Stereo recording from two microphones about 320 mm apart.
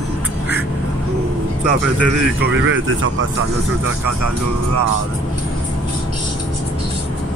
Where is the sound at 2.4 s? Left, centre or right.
Right.